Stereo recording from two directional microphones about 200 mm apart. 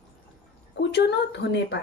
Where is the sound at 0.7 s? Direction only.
60° left (ahead or behind).